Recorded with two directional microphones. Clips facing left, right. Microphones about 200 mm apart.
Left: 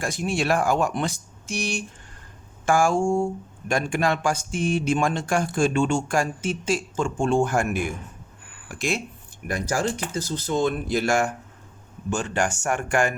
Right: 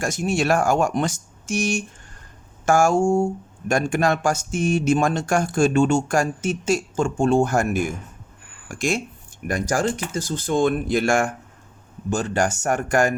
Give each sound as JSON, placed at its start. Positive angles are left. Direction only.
{"t": 0.0, "sound": "speech", "side_deg": -45}
{"t": 12.1, "sound": "speech", "side_deg": -40}